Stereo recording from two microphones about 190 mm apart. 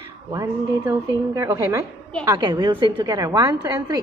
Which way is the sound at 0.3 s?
15° right (ahead or behind).